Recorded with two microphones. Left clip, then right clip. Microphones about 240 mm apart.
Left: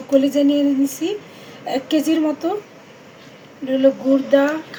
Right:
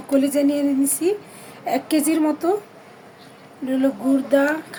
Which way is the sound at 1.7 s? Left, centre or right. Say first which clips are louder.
Left 1 dB; right.